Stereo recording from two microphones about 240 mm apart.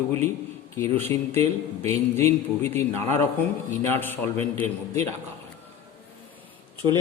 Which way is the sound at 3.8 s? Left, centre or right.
Centre.